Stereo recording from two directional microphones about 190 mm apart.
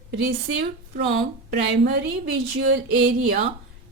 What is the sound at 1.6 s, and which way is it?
Speech, 70° right (ahead or behind).